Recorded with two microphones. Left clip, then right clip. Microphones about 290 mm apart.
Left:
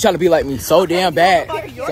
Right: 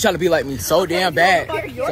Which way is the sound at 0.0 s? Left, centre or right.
Left.